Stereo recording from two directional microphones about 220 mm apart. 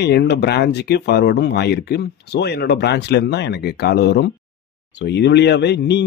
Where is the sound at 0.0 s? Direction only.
50° left (ahead or behind).